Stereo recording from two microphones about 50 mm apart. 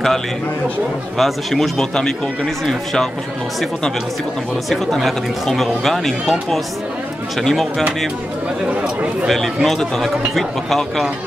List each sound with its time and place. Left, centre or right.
1.1 s speech: centre
4.6 s speech: centre
9.3 s speech: centre